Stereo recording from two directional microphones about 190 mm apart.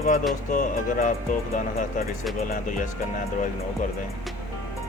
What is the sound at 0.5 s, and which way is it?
Speech, 45° left (ahead or behind).